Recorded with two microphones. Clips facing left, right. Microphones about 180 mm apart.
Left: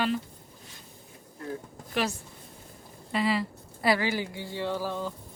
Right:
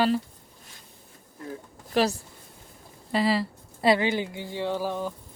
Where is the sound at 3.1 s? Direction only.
35° right (ahead or behind).